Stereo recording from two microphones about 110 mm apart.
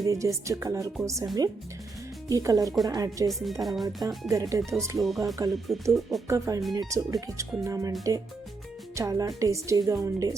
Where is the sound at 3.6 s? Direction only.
Centre (ahead or behind).